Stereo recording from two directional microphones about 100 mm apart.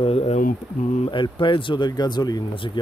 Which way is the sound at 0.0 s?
90° left.